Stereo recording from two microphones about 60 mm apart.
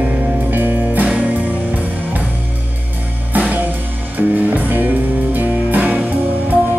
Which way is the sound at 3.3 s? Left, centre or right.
Right.